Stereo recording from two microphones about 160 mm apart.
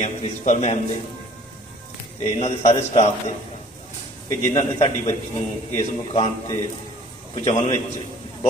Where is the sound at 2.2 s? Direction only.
45° left (ahead or behind).